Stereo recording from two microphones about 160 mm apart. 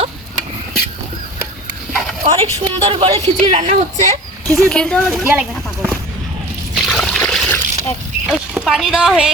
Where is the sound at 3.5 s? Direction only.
45° right (ahead or behind).